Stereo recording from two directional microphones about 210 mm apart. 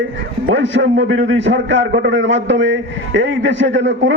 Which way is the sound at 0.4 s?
60° right (ahead or behind).